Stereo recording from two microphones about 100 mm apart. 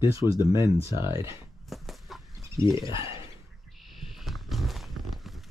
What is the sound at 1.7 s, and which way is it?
Chicken, centre (ahead or behind).